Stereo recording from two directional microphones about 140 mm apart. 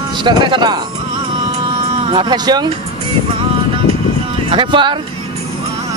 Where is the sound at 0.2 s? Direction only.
30° right (ahead or behind).